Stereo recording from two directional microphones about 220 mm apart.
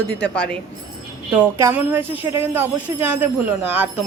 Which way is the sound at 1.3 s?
5° right (ahead or behind).